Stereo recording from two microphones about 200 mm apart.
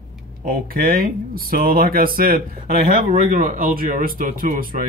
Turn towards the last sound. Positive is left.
turn(degrees=-45)  # may be behind; listen again after turning